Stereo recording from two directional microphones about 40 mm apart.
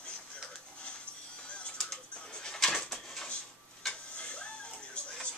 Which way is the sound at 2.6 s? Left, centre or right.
Centre.